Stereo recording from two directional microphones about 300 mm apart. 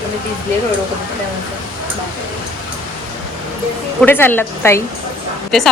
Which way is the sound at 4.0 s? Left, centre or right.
Centre.